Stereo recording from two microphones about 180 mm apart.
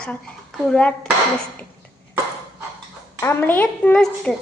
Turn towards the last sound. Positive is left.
turn(degrees=5)  # may be behind; listen again after turning